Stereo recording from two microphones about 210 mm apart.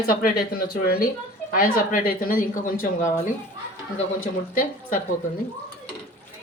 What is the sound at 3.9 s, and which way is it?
Speech, 40° left (ahead or behind).